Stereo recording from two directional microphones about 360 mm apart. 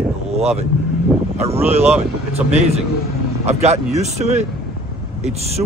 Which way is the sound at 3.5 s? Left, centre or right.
Centre.